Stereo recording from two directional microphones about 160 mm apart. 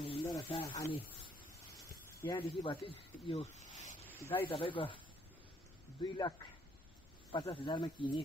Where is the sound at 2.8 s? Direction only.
35° left (ahead or behind).